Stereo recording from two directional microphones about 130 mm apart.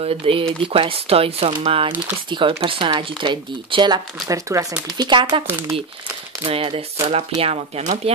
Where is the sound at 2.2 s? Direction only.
40° right (ahead or behind).